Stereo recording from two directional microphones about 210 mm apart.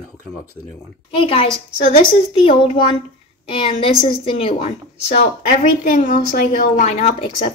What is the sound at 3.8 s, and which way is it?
A woman's voice, 25° left (ahead or behind).